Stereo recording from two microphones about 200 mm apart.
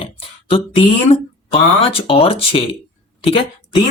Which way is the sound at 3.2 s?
30° left (ahead or behind).